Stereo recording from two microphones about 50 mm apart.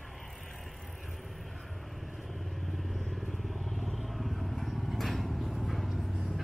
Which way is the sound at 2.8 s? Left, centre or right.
Centre.